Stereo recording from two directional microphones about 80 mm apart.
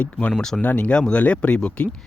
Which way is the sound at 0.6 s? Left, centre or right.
Centre.